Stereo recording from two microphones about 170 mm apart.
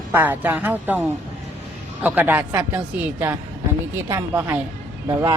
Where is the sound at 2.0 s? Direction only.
10° right (ahead or behind).